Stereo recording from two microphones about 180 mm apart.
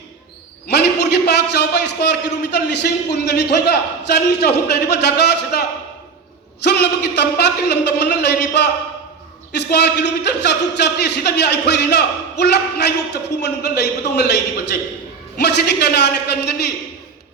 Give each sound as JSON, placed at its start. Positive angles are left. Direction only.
{"t": 0.7, "sound": "a man's voice", "side_deg": 70}